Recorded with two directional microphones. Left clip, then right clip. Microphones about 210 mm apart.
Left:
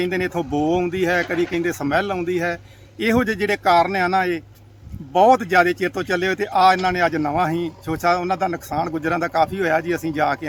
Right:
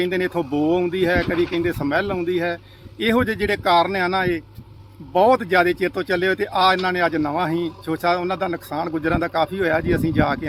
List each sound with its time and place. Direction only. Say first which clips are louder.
0.0 s speech: right 1 dB; 5° left (ahead or behind)
1.4 s speech: right 1 dB; 50° right (ahead or behind)
1.6 s speech: left 1 dB; 10° left (ahead or behind)